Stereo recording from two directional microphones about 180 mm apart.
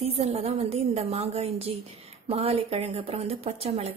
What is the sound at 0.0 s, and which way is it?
Speech, 35° right (ahead or behind).